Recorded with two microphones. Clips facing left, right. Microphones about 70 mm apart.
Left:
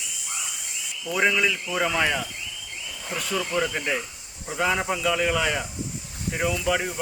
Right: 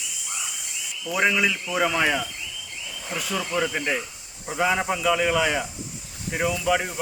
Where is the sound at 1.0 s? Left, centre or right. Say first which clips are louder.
Even; centre.